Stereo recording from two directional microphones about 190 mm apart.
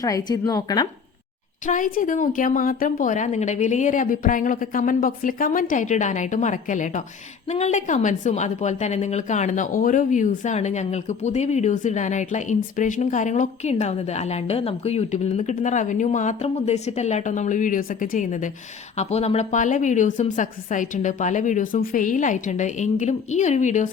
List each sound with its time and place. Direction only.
0.0 s a woman's voice: 20° left (ahead or behind)
1.6 s a woman's voice: 45° left (ahead or behind)